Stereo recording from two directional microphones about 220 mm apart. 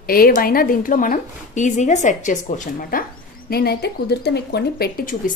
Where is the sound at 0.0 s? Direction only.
40° left (ahead or behind).